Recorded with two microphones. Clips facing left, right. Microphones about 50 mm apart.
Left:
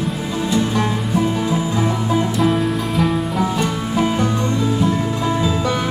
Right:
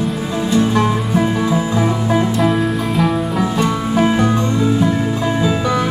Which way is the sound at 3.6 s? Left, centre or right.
Right.